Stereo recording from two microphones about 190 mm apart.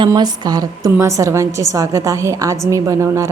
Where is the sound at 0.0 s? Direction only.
20° right (ahead or behind).